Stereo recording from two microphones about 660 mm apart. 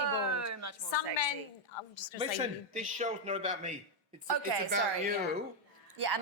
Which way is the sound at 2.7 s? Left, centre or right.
Centre.